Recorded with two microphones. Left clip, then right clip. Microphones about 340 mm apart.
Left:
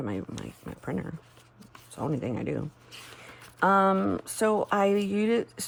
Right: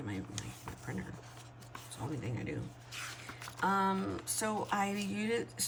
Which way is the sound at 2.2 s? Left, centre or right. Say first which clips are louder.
Left 10 dB; centre.